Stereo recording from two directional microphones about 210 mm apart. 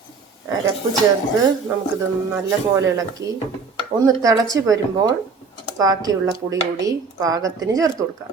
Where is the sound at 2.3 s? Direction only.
15° right (ahead or behind).